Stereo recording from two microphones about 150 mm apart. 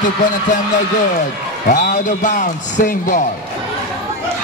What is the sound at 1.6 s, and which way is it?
A man's voice, 60° left (ahead or behind).